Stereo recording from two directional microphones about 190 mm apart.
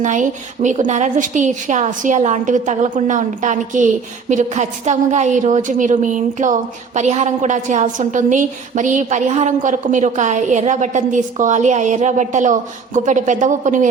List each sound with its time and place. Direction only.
0.0 s a woman's voice: 40° right (ahead or behind)